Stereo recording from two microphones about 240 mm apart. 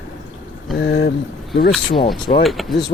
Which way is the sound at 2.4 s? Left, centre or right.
Centre.